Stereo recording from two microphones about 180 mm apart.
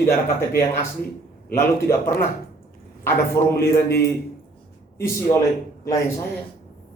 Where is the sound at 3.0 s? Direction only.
15° left (ahead or behind).